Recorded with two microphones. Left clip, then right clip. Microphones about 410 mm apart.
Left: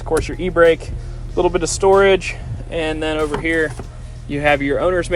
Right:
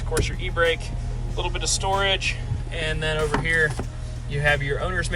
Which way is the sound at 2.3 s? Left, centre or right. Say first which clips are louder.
Left 8 dB; centre.